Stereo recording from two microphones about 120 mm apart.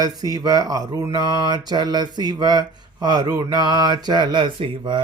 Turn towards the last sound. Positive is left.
turn(degrees=-45)  # may be behind; listen again after turning